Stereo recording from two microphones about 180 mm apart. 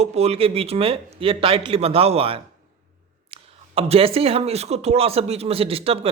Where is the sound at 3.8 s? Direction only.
30° right (ahead or behind).